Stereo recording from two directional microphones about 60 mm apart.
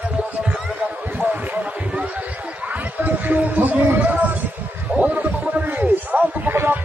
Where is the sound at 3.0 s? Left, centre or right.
Right.